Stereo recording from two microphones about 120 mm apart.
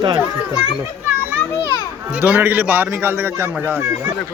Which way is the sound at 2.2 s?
15° right (ahead or behind).